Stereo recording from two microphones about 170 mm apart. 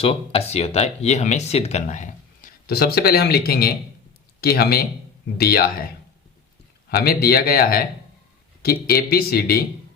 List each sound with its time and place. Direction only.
0.0 s speech: 35° left (ahead or behind)
2.6 s speech: 65° left (ahead or behind)
6.9 s speech: 65° left (ahead or behind)